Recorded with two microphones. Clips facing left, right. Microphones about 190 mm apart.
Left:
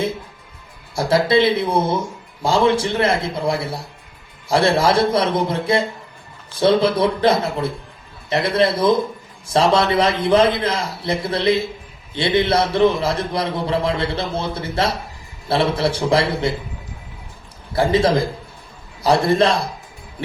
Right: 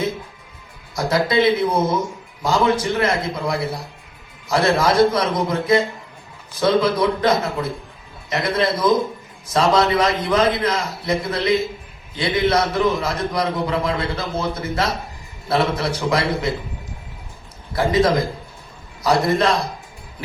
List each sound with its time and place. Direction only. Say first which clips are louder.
0.9 s a man's voice: left 2 dB; 30° left (ahead or behind)
17.7 s a man's voice: left 1 dB; 30° left (ahead or behind)